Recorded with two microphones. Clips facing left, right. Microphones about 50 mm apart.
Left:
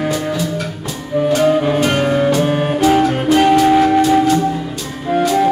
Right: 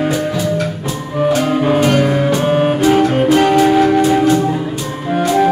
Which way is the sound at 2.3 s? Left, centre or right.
Centre.